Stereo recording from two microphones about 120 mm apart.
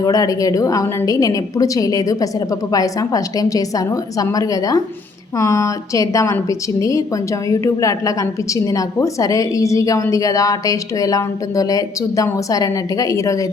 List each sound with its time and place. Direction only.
0.0 s a woman's voice: 30° left (ahead or behind)